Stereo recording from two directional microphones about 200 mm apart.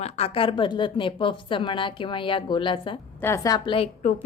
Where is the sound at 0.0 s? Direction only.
30° left (ahead or behind).